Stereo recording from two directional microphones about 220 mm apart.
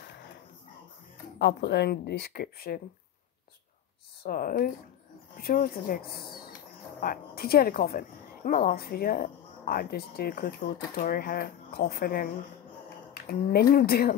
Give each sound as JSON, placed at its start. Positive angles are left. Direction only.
{"t": 1.4, "sound": "a woman's voice", "side_deg": 50}
{"t": 4.2, "sound": "a woman's voice", "side_deg": 40}